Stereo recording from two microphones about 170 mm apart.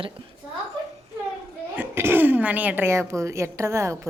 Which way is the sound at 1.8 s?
10° right (ahead or behind).